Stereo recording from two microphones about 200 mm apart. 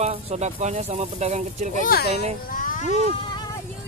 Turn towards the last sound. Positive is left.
turn(degrees=35)  # may be behind; listen again after turning